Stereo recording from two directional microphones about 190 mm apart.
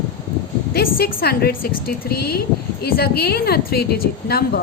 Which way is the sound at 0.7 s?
55° left (ahead or behind).